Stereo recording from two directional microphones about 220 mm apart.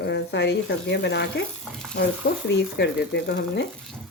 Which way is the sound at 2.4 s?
50° left (ahead or behind).